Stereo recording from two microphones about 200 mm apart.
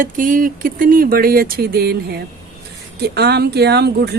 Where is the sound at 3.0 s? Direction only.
55° right (ahead or behind).